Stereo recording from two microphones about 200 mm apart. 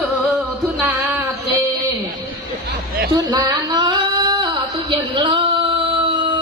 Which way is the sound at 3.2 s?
20° right (ahead or behind).